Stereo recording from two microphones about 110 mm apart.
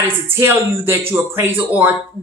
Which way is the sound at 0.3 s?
25° right (ahead or behind).